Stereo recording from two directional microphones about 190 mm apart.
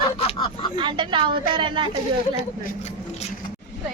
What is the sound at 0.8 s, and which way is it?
A woman's voice, 25° right (ahead or behind).